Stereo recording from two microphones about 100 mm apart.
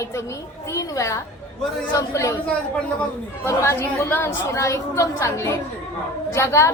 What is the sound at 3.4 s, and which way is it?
A woman's voice, 25° left (ahead or behind).